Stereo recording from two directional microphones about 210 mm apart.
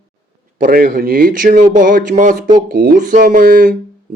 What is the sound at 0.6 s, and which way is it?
Speech, 45° right (ahead or behind).